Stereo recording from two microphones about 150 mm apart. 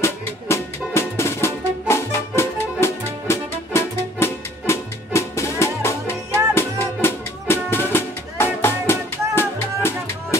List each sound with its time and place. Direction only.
0.0 s music: 20° left (ahead or behind)